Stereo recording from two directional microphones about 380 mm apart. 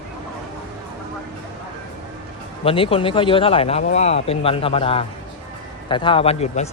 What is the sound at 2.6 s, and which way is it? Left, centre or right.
Speech, centre.